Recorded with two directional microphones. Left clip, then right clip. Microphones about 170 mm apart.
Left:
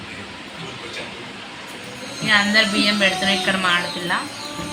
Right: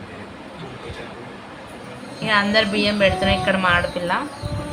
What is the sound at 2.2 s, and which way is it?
Speech, 60° right (ahead or behind).